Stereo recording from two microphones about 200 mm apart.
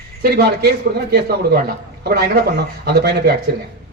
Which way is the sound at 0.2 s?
50° right (ahead or behind).